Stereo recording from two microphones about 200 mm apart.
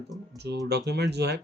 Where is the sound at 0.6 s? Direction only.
55° right (ahead or behind).